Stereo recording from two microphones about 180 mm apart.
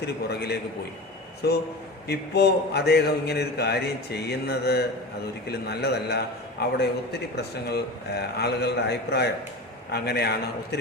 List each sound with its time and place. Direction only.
0.0 s a man's voice: 65° left (ahead or behind)